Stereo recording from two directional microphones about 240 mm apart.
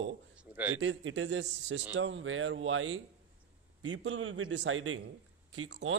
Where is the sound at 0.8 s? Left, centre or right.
Right.